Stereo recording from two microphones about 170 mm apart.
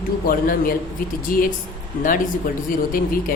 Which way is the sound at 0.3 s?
55° left (ahead or behind).